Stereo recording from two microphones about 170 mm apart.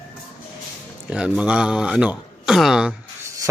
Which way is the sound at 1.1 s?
5° right (ahead or behind).